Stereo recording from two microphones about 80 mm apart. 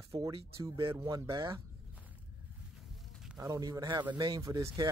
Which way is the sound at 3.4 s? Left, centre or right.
Right.